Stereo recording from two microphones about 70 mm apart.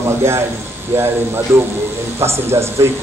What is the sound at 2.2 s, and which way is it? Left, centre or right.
Speech, right.